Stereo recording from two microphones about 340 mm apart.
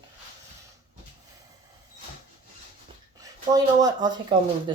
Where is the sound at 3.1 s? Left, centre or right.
Centre.